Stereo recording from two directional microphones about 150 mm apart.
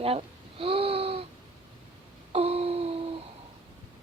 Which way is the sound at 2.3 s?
45° right (ahead or behind).